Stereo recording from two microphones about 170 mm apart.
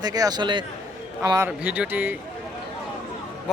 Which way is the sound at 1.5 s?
10° right (ahead or behind).